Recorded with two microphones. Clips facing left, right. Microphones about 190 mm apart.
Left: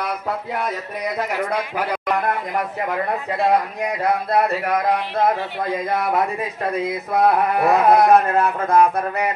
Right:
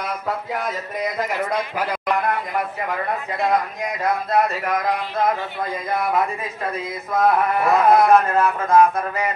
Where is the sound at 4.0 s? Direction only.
35° left (ahead or behind).